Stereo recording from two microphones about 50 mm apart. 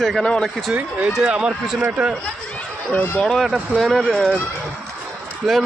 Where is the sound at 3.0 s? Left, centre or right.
Left.